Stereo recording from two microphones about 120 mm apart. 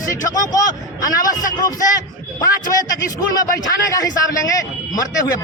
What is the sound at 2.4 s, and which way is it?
A man's voice, 30° left (ahead or behind).